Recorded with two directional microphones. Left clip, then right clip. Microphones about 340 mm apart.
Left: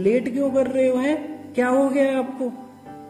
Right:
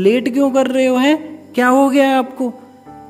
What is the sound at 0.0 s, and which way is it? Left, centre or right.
A man's voice, right.